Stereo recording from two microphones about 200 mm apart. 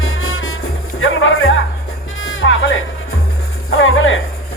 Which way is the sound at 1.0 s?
80° left.